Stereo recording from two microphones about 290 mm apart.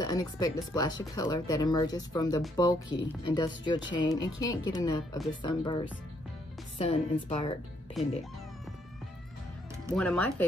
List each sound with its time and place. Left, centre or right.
0.0 s a woman's voice: centre
9.9 s speech: centre